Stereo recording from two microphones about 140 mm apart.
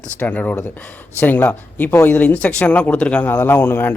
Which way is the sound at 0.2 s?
10° left (ahead or behind).